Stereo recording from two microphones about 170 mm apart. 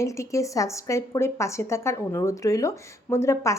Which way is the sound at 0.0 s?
20° left (ahead or behind).